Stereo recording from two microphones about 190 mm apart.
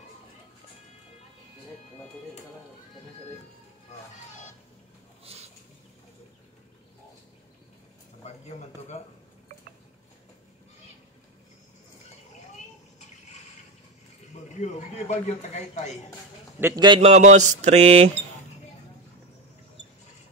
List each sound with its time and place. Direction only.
5.2 s a sound: 30° right (ahead or behind)
8.2 s speech: 35° left (ahead or behind)
14.5 s speech: 35° left (ahead or behind)
16.5 s speech: 15° right (ahead or behind); by 18.1 s 30° right (ahead or behind)